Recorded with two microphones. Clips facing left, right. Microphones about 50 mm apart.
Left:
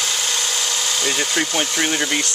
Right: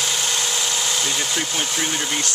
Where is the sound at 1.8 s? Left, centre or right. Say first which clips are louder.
Left 5 dB; left.